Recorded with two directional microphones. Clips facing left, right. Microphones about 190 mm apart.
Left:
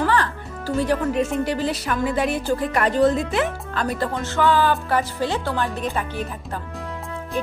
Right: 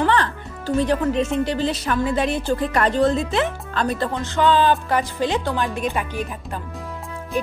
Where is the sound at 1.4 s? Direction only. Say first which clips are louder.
Right 1 dB; 25° right (ahead or behind).